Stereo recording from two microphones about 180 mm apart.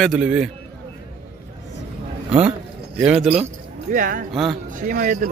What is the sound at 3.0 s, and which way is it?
Speech, 5° right (ahead or behind).